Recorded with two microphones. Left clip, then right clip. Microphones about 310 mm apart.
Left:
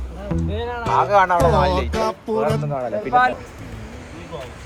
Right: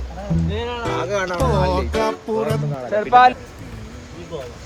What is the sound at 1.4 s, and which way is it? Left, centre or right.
Speech, centre.